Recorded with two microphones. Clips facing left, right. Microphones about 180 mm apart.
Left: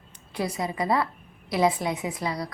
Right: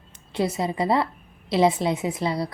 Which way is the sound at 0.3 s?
25° right (ahead or behind).